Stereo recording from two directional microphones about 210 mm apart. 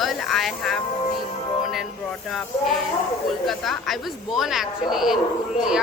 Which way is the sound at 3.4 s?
Centre (ahead or behind).